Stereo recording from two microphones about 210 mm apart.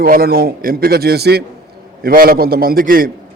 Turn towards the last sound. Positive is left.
turn(degrees=-45)  # may be behind; listen again after turning